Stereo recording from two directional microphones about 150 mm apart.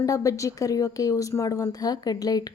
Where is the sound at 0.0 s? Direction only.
20° left (ahead or behind).